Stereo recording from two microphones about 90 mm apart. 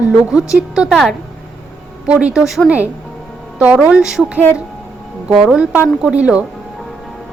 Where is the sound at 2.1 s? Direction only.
10° right (ahead or behind).